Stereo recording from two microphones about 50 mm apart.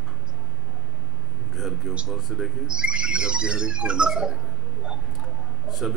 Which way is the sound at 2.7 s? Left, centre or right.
Centre.